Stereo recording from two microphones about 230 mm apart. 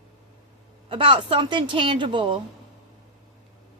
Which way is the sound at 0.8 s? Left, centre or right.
Right.